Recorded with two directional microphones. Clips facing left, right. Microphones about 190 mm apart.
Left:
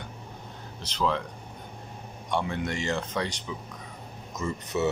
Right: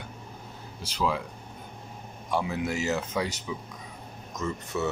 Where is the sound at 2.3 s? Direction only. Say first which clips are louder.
Right 1 dB; 5° right (ahead or behind).